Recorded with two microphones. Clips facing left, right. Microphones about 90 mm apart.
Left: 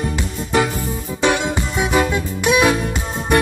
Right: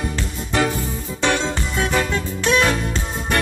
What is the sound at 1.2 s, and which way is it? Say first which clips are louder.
Music: left 3 dB; 15° left (ahead or behind).